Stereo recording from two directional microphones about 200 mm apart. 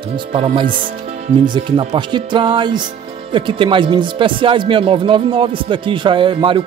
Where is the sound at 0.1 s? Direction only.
30° right (ahead or behind).